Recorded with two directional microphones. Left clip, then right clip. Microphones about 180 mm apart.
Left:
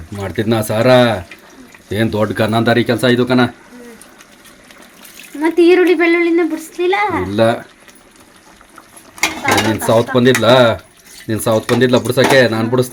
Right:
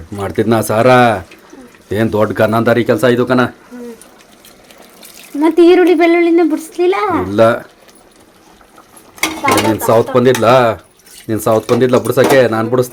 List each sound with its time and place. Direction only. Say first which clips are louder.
0.2 s speech: right 4 dB; 10° right (ahead or behind)
5.4 s speech: right 3 dB; 40° right (ahead or behind)
7.3 s speech: right 6 dB; centre (ahead or behind)
9.6 s speech: right 2 dB; centre (ahead or behind)